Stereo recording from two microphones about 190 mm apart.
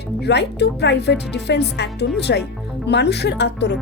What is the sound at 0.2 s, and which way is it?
A woman's voice, 60° left (ahead or behind).